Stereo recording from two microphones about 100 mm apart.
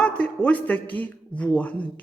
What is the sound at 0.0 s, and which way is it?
A man's voice, 10° left (ahead or behind).